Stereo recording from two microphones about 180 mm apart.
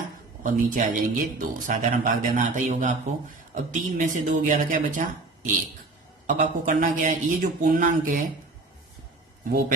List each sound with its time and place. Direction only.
0.4 s speech: 50° right (ahead or behind)